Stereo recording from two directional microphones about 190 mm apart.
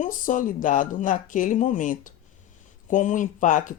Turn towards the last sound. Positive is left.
turn(degrees=45)  # may be behind; listen again after turning